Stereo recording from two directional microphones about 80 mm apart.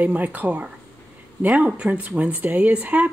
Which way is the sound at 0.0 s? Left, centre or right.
Right.